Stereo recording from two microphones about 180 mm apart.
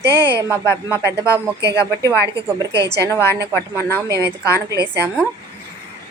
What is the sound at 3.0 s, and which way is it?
A woman's voice, 15° left (ahead or behind).